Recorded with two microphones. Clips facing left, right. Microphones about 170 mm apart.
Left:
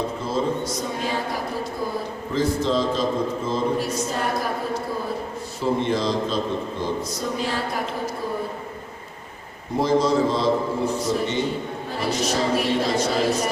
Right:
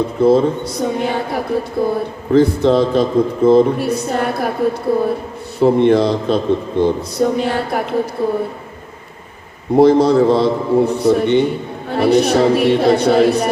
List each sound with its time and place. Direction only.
0.2 s a man's voice: 60° right (ahead or behind)
9.7 s a man's voice: 60° right (ahead or behind)